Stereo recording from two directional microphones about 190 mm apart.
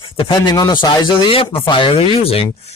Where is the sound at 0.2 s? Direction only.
25° left (ahead or behind).